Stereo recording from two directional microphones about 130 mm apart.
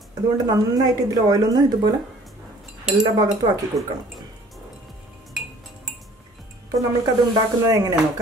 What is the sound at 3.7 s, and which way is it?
Speech, 25° right (ahead or behind).